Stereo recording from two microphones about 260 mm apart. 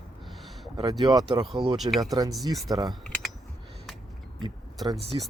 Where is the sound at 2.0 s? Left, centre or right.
Centre.